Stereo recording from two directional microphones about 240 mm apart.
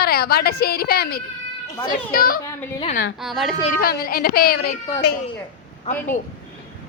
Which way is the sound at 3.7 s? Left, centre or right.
Left.